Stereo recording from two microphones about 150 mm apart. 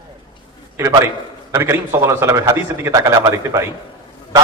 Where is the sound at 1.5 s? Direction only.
20° right (ahead or behind).